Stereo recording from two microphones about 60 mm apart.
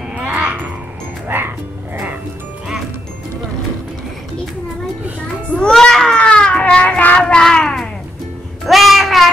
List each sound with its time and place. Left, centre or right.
0.1 s babbling: right
1.2 s music: right
5.6 s baby cry: centre
7.2 s cat: centre
8.6 s child singing: centre